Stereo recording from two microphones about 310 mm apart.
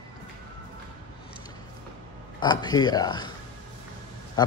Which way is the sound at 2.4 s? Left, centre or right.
Centre.